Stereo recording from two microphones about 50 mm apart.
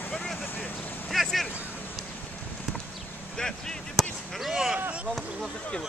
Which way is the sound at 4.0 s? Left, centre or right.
Centre.